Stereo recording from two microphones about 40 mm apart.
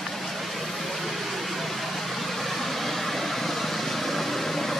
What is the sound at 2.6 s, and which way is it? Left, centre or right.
Vehicle, centre.